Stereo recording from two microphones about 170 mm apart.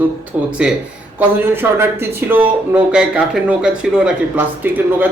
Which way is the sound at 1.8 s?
10° right (ahead or behind).